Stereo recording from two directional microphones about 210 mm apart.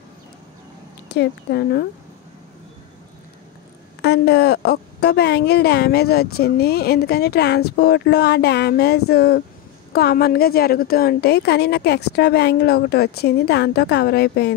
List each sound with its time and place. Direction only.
1.0 s speech: 55° left (ahead or behind)
4.0 s speech: 50° left (ahead or behind)